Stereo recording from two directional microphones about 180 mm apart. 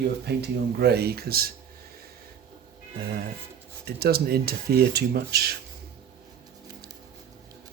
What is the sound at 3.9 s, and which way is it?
Speech, 60° right (ahead or behind).